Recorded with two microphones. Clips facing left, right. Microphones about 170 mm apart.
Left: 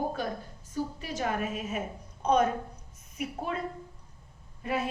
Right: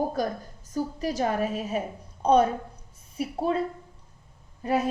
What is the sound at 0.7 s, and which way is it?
A woman's voice, 40° right (ahead or behind).